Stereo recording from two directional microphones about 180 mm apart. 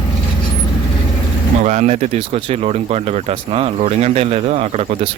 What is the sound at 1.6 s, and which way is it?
Speech, 40° right (ahead or behind).